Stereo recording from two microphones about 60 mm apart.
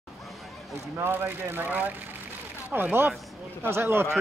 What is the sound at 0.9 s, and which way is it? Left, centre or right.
A man's voice, right.